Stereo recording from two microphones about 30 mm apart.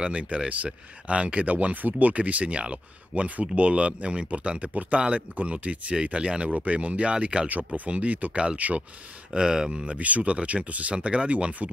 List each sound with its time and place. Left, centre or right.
0.0 s speech: right
6.1 s speech: right
7.4 s speech: right
7.9 s speech: right
9.3 s speech: right
9.8 s speech: right